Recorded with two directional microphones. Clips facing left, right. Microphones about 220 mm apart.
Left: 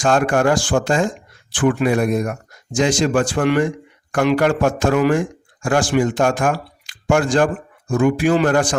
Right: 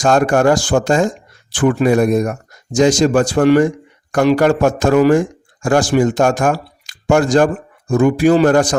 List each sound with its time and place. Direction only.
0.0 s speech: 40° right (ahead or behind)